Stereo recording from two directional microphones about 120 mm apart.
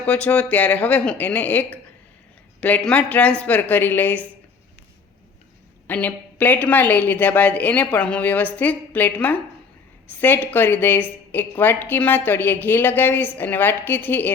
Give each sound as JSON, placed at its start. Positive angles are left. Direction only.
{"t": 0.0, "sound": "a woman's voice", "side_deg": 10}
{"t": 5.9, "sound": "a woman's voice", "side_deg": 15}